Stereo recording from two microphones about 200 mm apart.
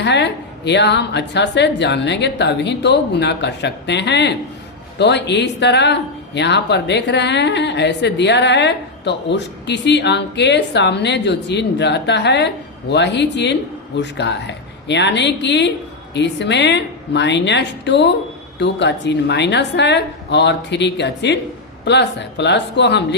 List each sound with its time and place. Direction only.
0.0 s speech: 60° left (ahead or behind)